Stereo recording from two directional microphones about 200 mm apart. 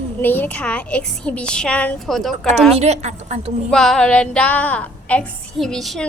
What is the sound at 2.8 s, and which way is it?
Speech, 35° right (ahead or behind).